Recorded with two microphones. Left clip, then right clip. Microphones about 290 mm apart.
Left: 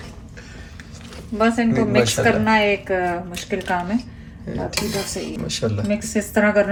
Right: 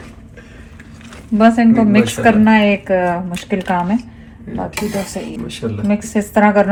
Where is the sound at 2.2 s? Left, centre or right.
Right.